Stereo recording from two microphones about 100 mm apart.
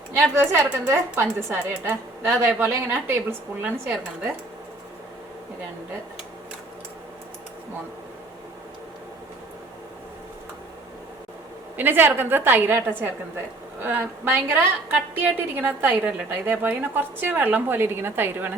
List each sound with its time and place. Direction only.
0.3 s a woman's voice: 25° right (ahead or behind)
11.8 s a woman's voice: 20° right (ahead or behind)